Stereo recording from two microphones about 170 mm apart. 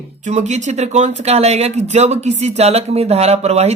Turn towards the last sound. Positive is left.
turn(degrees=-40)  # may be behind; listen again after turning